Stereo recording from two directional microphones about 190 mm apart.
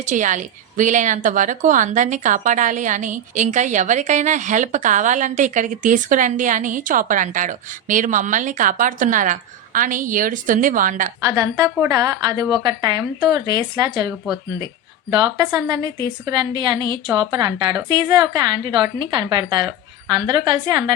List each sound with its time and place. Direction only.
0.0 s a woman's voice: 40° right (ahead or behind)
11.2 s a woman's voice: 15° right (ahead or behind)
15.1 s a woman's voice: 25° right (ahead or behind)